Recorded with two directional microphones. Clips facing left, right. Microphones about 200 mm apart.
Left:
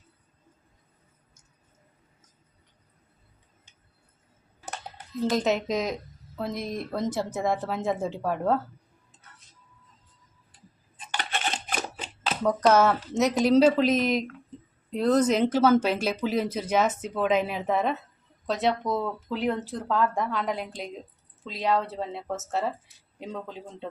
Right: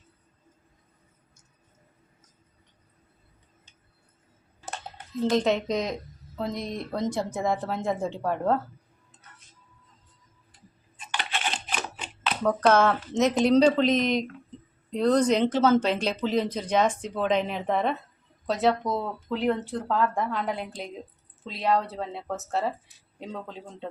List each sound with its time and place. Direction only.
5.3 s speech: 5° left (ahead or behind)
11.7 s a sound: 40° left (ahead or behind)
12.4 s speech: 10° left (ahead or behind)